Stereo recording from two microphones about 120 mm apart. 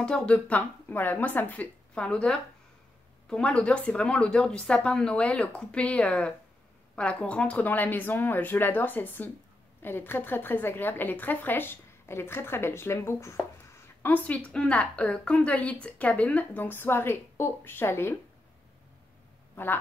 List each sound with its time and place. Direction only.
0.0 s a woman's voice: 10° left (ahead or behind)
19.5 s speech: 15° left (ahead or behind)